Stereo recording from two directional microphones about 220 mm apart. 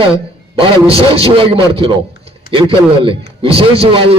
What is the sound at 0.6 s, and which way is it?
A man's voice, 25° right (ahead or behind).